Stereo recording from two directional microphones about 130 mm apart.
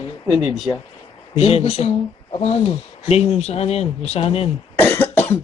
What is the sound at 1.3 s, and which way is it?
Speech, 50° left (ahead or behind).